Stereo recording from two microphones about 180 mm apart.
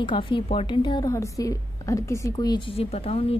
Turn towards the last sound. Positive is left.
turn(degrees=35)  # may be behind; listen again after turning